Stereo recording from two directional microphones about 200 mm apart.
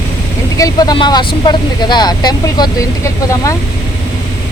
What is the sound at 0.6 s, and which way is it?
Speech, 20° left (ahead or behind).